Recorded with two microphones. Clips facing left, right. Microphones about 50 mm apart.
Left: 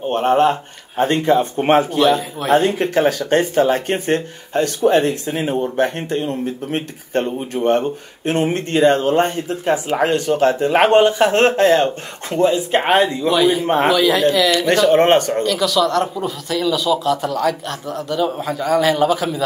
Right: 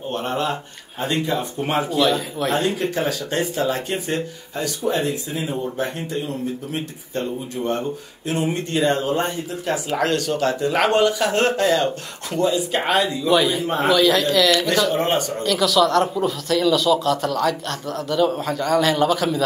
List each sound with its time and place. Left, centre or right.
0.1 s speech: left
2.0 s speech: centre
2.5 s speech: left
9.7 s speech: left
13.3 s speech: centre
14.7 s speech: left
15.4 s speech: centre